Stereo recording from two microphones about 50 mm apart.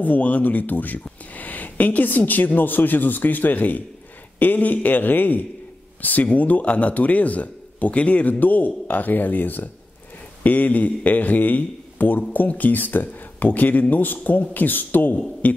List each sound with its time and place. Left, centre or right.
0.0 s speech: left